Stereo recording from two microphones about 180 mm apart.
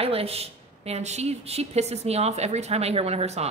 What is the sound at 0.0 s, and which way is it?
A woman's voice, 35° right (ahead or behind).